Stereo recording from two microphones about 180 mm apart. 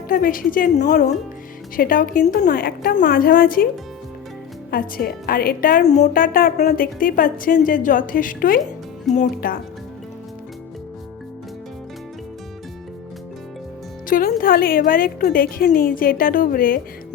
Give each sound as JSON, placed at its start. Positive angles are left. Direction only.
{"t": 0.1, "sound": "a woman's voice", "side_deg": 50}
{"t": 3.1, "sound": "a woman's voice", "side_deg": 60}
{"t": 4.7, "sound": "a woman's voice", "side_deg": 55}
{"t": 14.1, "sound": "a woman's voice", "side_deg": 55}